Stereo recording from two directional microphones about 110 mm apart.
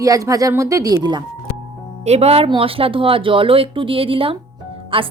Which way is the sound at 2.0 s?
75° right (ahead or behind).